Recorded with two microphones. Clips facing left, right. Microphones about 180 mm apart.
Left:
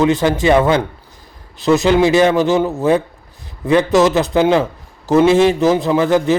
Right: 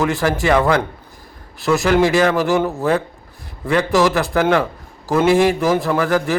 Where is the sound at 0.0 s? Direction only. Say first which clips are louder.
Left 4 dB; 20° left (ahead or behind).